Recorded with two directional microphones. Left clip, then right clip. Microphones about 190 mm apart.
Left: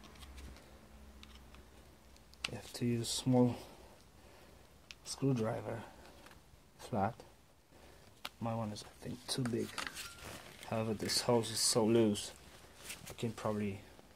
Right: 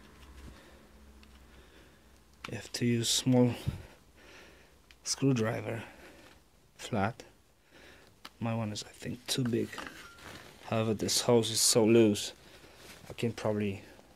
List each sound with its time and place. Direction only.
2.5 s speech: 25° right (ahead or behind)
5.0 s speech: 25° right (ahead or behind)
9.3 s speech: 60° right (ahead or behind)
10.7 s speech: 30° right (ahead or behind)